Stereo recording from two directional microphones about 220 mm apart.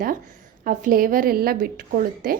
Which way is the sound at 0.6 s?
40° right (ahead or behind).